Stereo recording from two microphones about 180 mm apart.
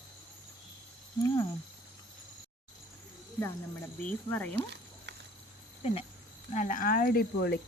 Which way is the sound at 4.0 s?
10° left (ahead or behind).